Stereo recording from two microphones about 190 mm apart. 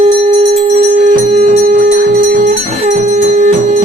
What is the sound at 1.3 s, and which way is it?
Music, 35° right (ahead or behind).